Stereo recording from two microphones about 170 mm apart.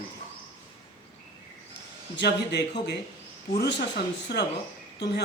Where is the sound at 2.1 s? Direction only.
85° left.